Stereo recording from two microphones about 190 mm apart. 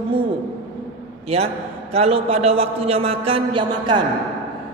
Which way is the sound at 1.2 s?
30° right (ahead or behind).